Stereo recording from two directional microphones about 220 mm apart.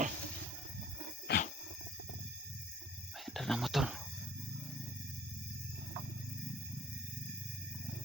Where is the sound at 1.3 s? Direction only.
45° left (ahead or behind).